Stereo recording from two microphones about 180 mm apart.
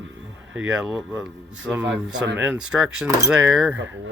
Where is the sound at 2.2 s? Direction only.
75° right (ahead or behind).